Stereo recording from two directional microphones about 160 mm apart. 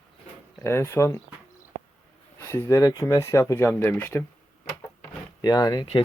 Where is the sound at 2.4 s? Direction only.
15° left (ahead or behind).